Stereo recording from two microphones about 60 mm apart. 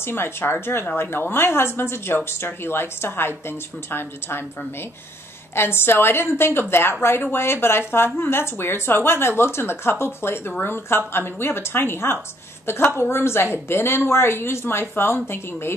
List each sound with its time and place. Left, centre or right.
0.0 s a woman's voice: left
5.5 s a woman's voice: left